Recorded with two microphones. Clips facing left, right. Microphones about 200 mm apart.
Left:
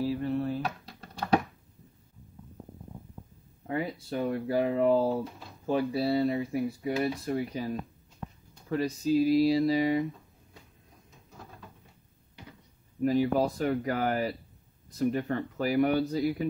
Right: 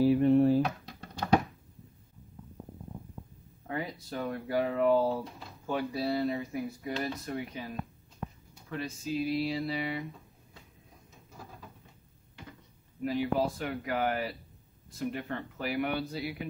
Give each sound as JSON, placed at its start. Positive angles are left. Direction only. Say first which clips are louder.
{"t": 0.0, "sound": "a sound", "louder": "right 7 dB", "side_deg": -20}
{"t": 3.6, "sound": "speech", "louder": "left 4 dB", "side_deg": 30}
{"t": 5.0, "sound": "speech", "louder": "left 2 dB", "side_deg": 0}
{"t": 5.7, "sound": "speech", "louder": "left 4 dB", "side_deg": 30}
{"t": 13.0, "sound": "speech", "louder": "left 4 dB", "side_deg": 40}